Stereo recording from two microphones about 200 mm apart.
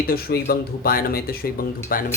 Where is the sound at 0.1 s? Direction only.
50° left (ahead or behind).